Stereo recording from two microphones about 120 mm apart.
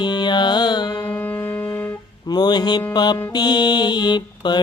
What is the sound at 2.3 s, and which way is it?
Mantra, 35° left (ahead or behind).